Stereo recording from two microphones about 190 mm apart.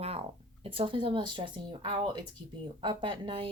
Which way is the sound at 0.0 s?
30° right (ahead or behind).